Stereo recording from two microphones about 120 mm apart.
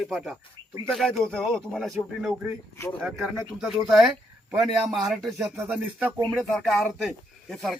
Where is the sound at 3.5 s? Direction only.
Centre (ahead or behind).